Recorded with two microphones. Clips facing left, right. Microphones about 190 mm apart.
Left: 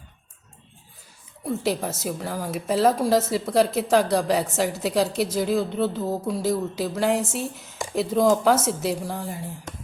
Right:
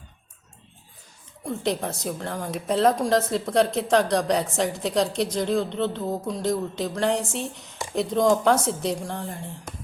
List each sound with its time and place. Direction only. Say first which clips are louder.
1.5 s speech: left 1 dB; 5° left (ahead or behind)